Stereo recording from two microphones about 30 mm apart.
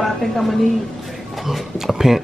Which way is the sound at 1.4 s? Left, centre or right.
Centre.